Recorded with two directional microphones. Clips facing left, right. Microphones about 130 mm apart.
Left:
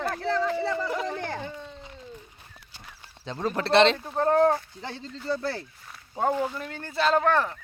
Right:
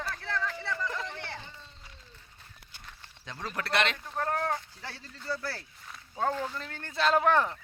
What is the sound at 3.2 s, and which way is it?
Speech, 30° left (ahead or behind).